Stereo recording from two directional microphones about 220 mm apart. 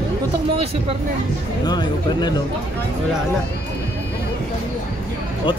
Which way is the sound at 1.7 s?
20° left (ahead or behind).